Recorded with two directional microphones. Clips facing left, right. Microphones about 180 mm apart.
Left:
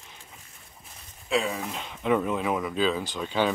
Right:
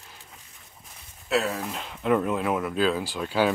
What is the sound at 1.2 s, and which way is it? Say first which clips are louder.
Speech: right 1 dB; 5° right (ahead or behind).